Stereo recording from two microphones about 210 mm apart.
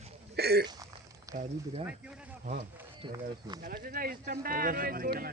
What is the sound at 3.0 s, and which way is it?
Speech, 20° right (ahead or behind).